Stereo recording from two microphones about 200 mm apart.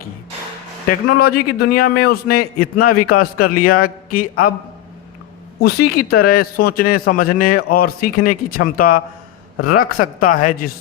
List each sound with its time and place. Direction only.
1.2 s a man's voice: 50° left (ahead or behind)
5.6 s a man's voice: 50° left (ahead or behind)